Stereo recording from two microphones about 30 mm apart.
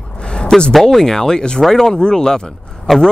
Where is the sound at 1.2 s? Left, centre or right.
Left.